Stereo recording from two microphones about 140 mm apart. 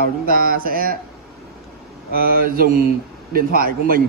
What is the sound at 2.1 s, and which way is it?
A man's voice, 90° right.